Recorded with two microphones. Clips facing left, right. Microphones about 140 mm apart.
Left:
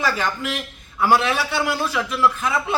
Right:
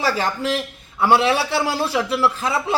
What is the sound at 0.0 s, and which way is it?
A man's voice, 30° right (ahead or behind).